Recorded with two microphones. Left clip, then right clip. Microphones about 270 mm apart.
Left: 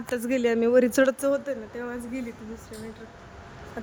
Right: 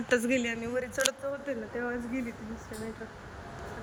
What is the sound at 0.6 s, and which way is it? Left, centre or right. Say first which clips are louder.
Speech: left 13 dB; left.